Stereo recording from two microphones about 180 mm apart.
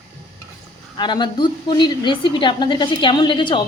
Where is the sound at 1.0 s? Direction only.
25° left (ahead or behind).